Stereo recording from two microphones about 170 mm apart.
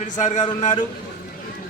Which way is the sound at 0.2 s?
45° left (ahead or behind).